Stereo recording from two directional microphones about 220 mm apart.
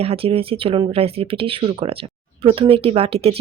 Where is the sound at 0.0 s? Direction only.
25° right (ahead or behind).